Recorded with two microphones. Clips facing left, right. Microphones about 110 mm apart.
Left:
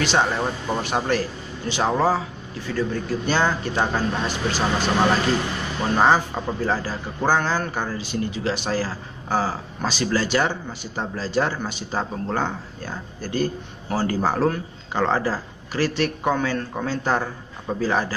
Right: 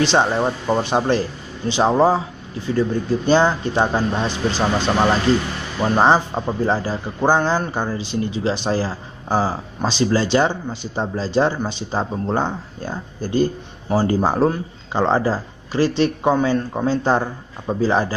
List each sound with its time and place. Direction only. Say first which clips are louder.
0.0 s speech: right 4 dB; 25° right (ahead or behind)
5.8 s speech: right 3 dB; 20° right (ahead or behind)